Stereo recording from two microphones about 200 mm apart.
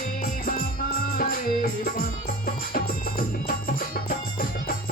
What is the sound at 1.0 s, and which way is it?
Music, 45° left (ahead or behind).